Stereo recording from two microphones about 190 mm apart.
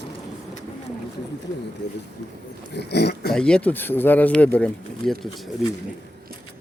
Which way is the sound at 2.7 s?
60° left (ahead or behind).